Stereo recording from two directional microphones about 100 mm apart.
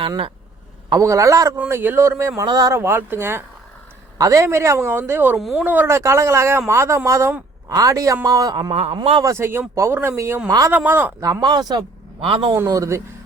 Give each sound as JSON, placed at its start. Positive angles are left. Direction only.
{"t": 1.0, "sound": "a man's voice", "side_deg": -30}
{"t": 1.5, "sound": "a man's voice", "side_deg": -20}
{"t": 2.5, "sound": "a man's voice", "side_deg": -40}
{"t": 2.7, "sound": "a man's voice", "side_deg": -25}
{"t": 5.4, "sound": "speech", "side_deg": 0}
{"t": 5.6, "sound": "speech", "side_deg": -20}
{"t": 6.0, "sound": "a man's voice", "side_deg": -30}
{"t": 8.7, "sound": "speech", "side_deg": -90}
{"t": 9.2, "sound": "a man's voice", "side_deg": -25}
{"t": 11.2, "sound": "speech", "side_deg": -40}
{"t": 12.2, "sound": "a man's voice", "side_deg": -60}
{"t": 12.5, "sound": "a man's voice", "side_deg": -35}